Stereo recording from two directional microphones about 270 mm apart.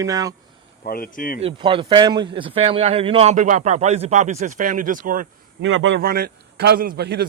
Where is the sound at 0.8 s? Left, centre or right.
Left.